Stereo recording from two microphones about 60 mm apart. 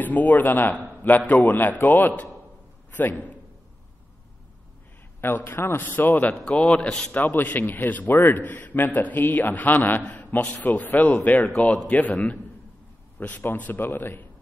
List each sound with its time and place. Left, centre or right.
0.0 s a man's voice: left
5.4 s a man's voice: left
6.4 s a man's voice: centre
7.2 s a man's voice: left
11.5 s a man's voice: centre; by 14.2 s left